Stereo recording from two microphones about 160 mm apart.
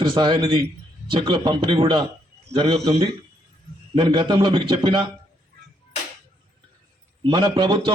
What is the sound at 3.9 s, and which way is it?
A man's voice, 30° right (ahead or behind).